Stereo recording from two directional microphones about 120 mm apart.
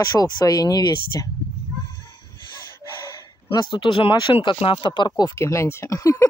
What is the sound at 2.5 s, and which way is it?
Gasp, 25° left (ahead or behind).